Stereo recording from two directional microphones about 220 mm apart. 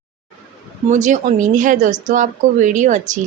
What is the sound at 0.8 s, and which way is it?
A woman's voice, 35° right (ahead or behind).